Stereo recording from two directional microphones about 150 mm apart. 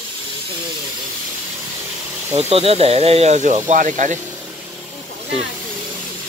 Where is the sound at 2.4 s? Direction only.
40° right (ahead or behind); by 4.1 s 60° right (ahead or behind).